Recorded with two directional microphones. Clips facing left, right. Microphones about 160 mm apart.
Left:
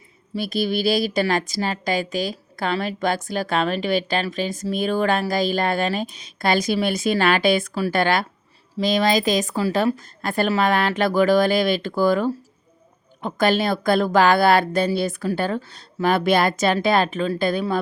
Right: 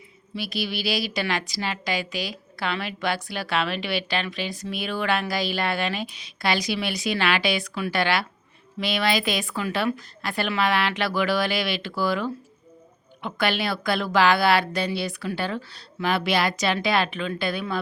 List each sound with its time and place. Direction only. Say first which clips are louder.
0.3 s a woman's voice: left 7 dB; 45° left (ahead or behind)